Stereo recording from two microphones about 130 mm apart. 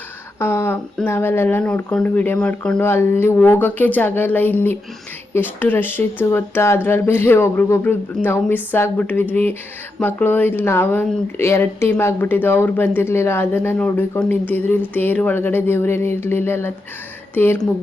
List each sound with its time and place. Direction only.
0.3 s a sound: 20° left (ahead or behind)
1.0 s speech: 15° left (ahead or behind)
2.8 s speech: 20° left (ahead or behind)